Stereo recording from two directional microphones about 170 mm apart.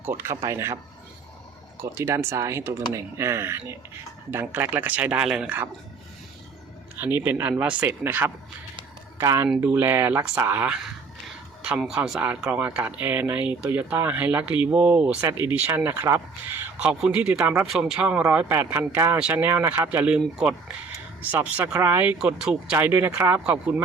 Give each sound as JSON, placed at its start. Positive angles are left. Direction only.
{"t": 0.0, "sound": "speech", "side_deg": -15}
{"t": 1.8, "sound": "speech", "side_deg": -15}
{"t": 7.0, "sound": "speech", "side_deg": -10}